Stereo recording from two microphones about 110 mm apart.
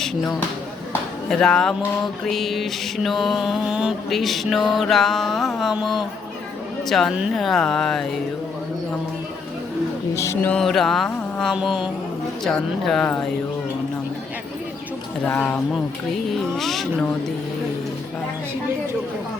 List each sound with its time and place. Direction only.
1.3 s mantra: 5° left (ahead or behind)
10.6 s mantra: 5° left (ahead or behind)
12.5 s mantra: 5° left (ahead or behind)
15.3 s speech: 15° left (ahead or behind)
16.6 s mantra: centre (ahead or behind)